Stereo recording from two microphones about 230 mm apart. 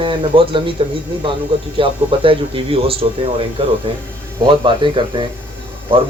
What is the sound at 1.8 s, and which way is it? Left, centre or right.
A man's voice, right.